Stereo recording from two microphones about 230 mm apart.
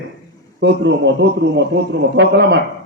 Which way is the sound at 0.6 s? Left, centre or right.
Right.